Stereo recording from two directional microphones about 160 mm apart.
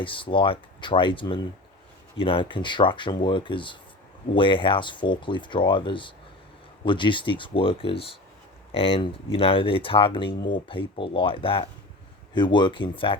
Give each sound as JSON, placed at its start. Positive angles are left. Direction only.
{"t": 0.0, "sound": "speech", "side_deg": 30}